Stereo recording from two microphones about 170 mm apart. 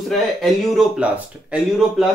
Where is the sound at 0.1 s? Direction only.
Centre (ahead or behind).